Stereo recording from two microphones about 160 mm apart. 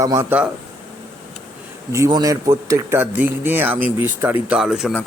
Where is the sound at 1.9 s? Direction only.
20° right (ahead or behind).